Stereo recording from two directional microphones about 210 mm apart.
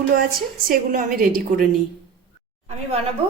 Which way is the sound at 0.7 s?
40° right (ahead or behind).